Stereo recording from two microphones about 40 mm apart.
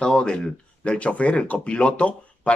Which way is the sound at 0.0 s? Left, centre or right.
Left.